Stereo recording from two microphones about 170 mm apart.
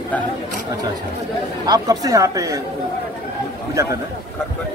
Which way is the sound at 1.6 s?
25° right (ahead or behind).